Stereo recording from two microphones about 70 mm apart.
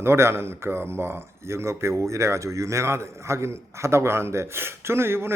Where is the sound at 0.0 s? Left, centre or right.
Right.